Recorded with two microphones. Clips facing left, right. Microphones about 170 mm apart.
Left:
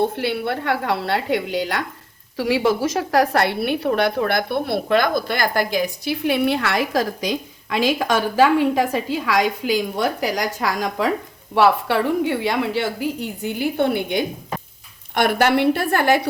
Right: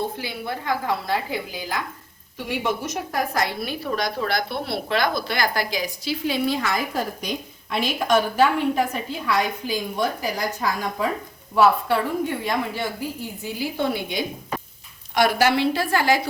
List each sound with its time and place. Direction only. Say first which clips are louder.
0.0 s a woman's voice: left 7 dB; 70° left (ahead or behind)
2.4 s a woman's voice: left 8 dB; 90° left; by 16.2 s 55° left (ahead or behind)